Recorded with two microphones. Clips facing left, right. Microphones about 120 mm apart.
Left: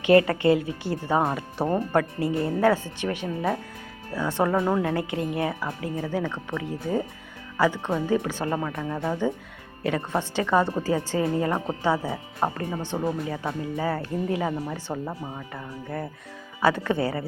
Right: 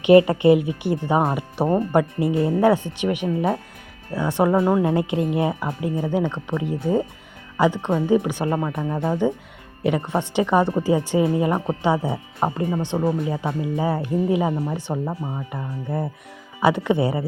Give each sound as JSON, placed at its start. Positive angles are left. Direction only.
{"t": 0.0, "sound": "a woman's voice", "side_deg": -20}